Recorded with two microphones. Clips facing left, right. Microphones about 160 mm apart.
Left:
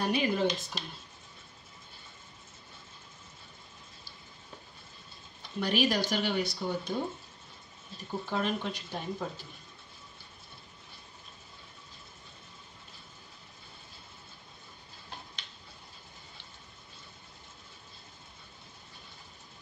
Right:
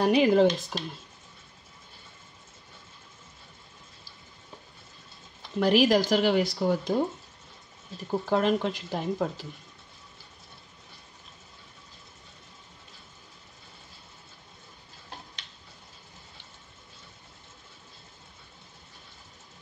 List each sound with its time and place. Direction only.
0.0 s speech: 90° right
5.6 s speech: 90° right
8.3 s speech: 90° right